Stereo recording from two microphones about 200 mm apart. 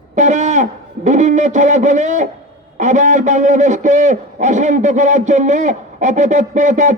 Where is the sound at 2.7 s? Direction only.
35° right (ahead or behind).